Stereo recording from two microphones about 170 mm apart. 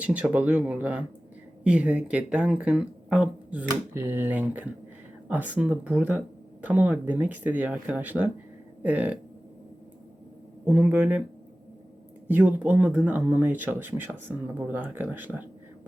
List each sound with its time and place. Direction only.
0.0 s speech: 10° right (ahead or behind)
10.7 s speech: 10° right (ahead or behind)
12.3 s speech: 10° right (ahead or behind)